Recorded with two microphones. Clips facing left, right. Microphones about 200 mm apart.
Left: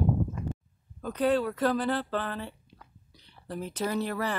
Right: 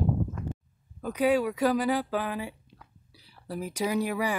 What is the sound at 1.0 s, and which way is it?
Speech, 10° right (ahead or behind).